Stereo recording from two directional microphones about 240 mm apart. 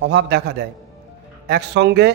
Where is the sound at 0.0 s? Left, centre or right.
Right.